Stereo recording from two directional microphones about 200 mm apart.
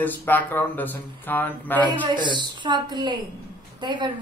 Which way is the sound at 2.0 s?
20° right (ahead or behind).